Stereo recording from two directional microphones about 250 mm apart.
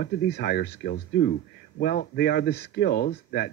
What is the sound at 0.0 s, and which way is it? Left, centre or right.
Speech, left.